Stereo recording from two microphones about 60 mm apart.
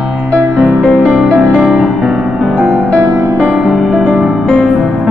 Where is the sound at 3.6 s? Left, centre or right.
Centre.